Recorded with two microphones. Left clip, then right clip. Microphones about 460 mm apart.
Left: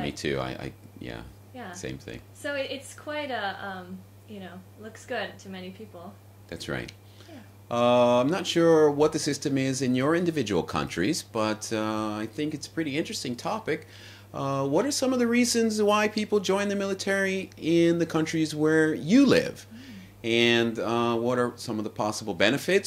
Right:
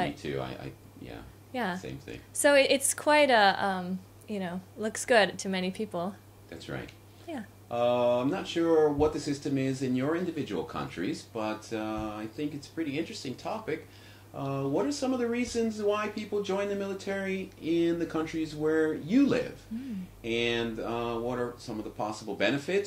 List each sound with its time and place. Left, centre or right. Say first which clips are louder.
0.1 s speech: left 5 dB; left
1.5 s a woman's voice: right 4 dB; right
7.6 s speech: left 5 dB; left